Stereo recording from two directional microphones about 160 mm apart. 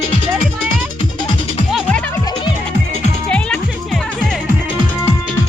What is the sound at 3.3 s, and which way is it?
Music, 5° left (ahead or behind).